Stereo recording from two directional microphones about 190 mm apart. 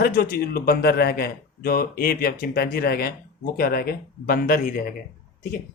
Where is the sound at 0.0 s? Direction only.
55° left (ahead or behind).